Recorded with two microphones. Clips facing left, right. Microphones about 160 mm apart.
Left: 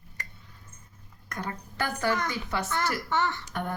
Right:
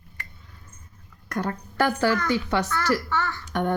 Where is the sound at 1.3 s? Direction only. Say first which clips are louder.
Right 7 dB; 65° right (ahead or behind).